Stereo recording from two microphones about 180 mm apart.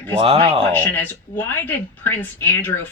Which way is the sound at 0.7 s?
10° left (ahead or behind).